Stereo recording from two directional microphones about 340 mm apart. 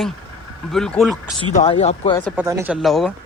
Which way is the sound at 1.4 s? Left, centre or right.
Centre.